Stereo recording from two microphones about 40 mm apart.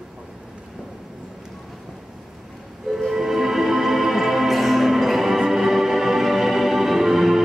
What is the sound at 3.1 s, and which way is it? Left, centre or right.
Music, centre.